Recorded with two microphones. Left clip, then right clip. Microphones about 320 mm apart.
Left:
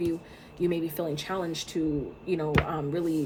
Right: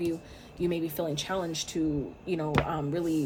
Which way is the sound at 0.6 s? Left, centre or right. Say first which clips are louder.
Left 1 dB; centre.